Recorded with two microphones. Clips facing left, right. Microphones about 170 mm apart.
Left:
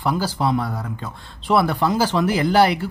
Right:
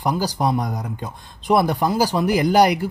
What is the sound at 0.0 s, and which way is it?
Speech, 15° right (ahead or behind).